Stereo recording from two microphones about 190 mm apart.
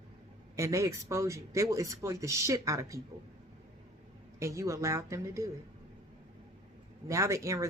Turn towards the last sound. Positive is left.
turn(degrees=-15)  # may be behind; listen again after turning